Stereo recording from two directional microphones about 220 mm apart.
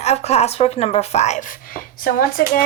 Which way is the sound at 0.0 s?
30° left (ahead or behind).